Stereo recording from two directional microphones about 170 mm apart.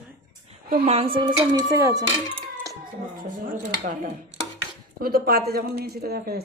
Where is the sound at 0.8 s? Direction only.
35° right (ahead or behind); by 2.0 s 20° right (ahead or behind).